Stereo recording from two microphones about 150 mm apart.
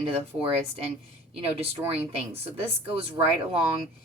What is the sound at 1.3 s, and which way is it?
Speech, 40° right (ahead or behind).